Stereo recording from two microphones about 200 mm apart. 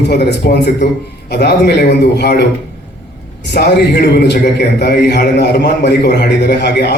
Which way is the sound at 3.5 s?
55° left (ahead or behind).